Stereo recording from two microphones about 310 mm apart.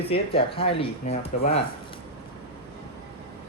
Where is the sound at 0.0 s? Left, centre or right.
Centre.